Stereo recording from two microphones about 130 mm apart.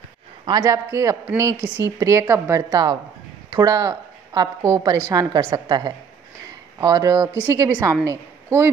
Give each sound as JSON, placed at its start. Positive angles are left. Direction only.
{"t": 0.5, "sound": "a woman's voice", "side_deg": -35}
{"t": 0.8, "sound": "a woman's voice", "side_deg": -20}
{"t": 2.7, "sound": "a woman's voice", "side_deg": -30}
{"t": 5.7, "sound": "a woman's voice", "side_deg": -35}